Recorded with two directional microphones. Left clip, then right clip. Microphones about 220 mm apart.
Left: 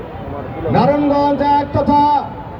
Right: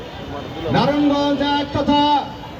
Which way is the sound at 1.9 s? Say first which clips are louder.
Left 3 dB; 10° left (ahead or behind).